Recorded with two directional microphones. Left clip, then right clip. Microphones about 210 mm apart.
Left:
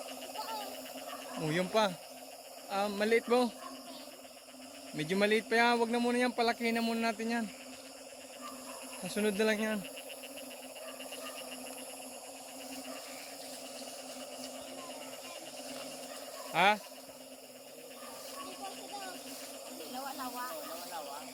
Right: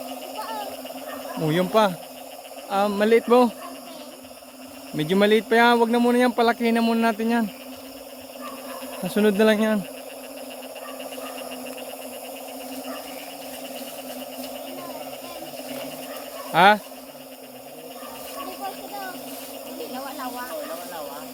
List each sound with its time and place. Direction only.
1.5 s speech: 15° right (ahead or behind)
4.9 s speech: 15° right (ahead or behind)
9.0 s speech: 25° right (ahead or behind)
16.5 s speech: 20° right (ahead or behind)